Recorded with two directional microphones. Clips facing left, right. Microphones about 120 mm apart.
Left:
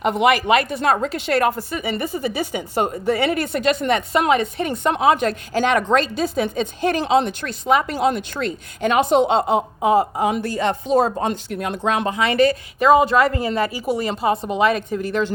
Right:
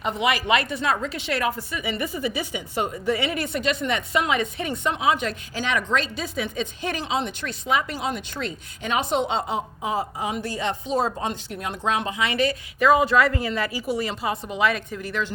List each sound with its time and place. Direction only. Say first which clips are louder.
0.0 s a woman's voice: left 7 dB; 55° left (ahead or behind)
9.4 s speech: left 9 dB; 65° left (ahead or behind)
12.2 s a woman's voice: left 8 dB; 40° left (ahead or behind)
12.8 s speech: left 4 dB; 20° left (ahead or behind)
13.3 s a woman's voice: left 4 dB; 40° left (ahead or behind)
13.6 s a woman's voice: left 4 dB; 20° left (ahead or behind)